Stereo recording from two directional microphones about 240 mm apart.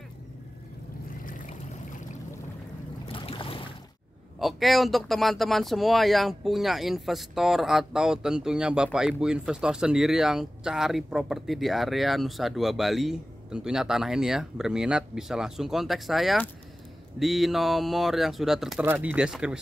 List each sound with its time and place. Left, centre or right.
3.1 s boat: left
4.4 s speech: centre